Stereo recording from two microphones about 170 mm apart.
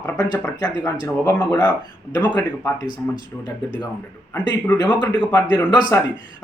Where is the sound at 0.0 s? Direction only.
15° left (ahead or behind).